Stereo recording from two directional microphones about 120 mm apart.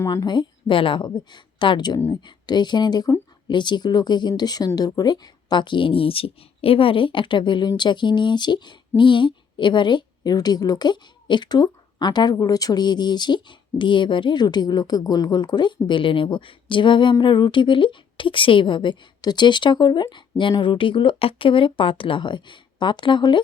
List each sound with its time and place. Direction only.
0.0 s a woman's voice: 35° left (ahead or behind)